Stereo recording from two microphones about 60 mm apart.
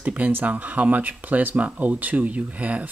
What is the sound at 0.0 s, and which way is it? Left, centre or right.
Speech, right.